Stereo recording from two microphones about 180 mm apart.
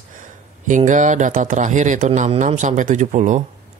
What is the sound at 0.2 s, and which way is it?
Speech, 45° right (ahead or behind).